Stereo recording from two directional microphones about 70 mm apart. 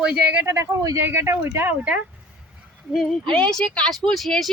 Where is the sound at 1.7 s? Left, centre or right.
Centre.